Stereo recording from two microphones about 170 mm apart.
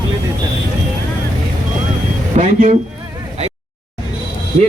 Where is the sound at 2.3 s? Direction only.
45° right (ahead or behind).